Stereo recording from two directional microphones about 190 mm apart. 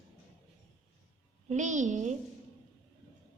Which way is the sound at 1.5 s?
40° right (ahead or behind).